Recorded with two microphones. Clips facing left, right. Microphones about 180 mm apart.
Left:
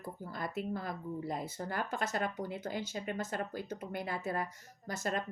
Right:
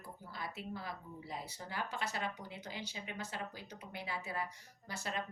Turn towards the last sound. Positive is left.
turn(degrees=45)  # may be behind; listen again after turning